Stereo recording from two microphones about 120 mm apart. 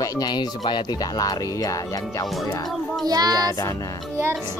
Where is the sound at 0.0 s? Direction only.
30° left (ahead or behind).